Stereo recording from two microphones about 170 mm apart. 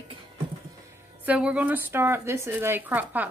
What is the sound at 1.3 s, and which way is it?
Speech, 5° right (ahead or behind).